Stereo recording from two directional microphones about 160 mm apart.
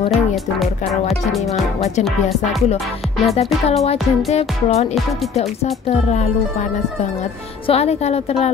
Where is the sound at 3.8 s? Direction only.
40° left (ahead or behind).